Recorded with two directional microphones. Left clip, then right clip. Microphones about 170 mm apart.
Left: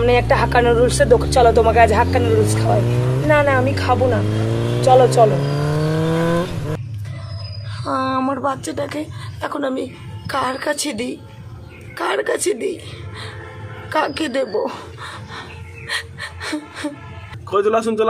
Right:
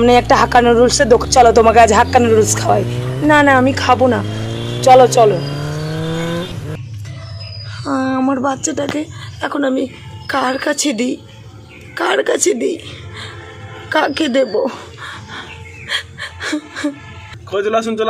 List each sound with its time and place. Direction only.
0.0 s speech: 40° right (ahead or behind)
2.8 s speech: centre (ahead or behind)
3.3 s a woman's voice: 55° right (ahead or behind)
4.2 s vehicle: centre (ahead or behind)
7.8 s speech: 35° right (ahead or behind)
13.8 s a sound: 30° right (ahead or behind)
17.5 s a man's voice: 15° left (ahead or behind)